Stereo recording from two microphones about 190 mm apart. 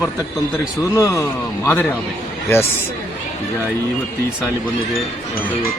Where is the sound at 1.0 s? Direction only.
15° left (ahead or behind).